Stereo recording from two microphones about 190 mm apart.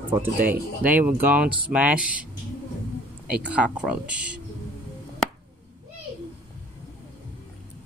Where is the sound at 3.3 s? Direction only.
5° right (ahead or behind).